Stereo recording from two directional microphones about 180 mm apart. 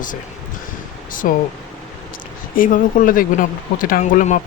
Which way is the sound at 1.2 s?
45° left (ahead or behind).